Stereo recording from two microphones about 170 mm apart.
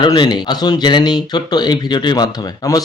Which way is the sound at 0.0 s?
25° left (ahead or behind).